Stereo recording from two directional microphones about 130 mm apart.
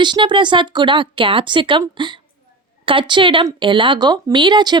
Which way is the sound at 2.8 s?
40° right (ahead or behind).